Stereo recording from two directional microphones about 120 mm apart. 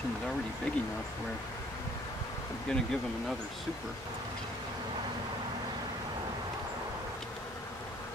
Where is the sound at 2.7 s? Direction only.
5° left (ahead or behind).